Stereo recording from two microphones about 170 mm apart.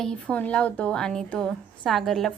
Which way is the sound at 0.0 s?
5° left (ahead or behind).